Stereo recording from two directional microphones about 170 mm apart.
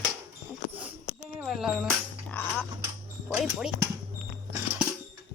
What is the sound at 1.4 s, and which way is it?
Speech, 5° right (ahead or behind).